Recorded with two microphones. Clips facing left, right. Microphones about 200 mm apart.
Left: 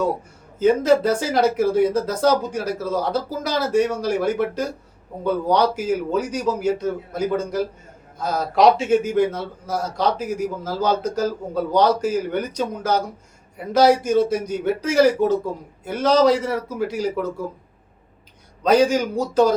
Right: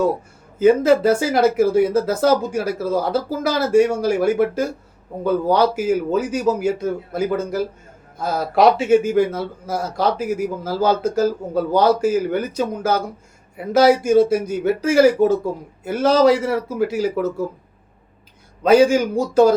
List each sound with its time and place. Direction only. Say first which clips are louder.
0.6 s a man's voice: right 3 dB; 10° right (ahead or behind)
18.6 s a man's voice: right 3 dB; 10° right (ahead or behind)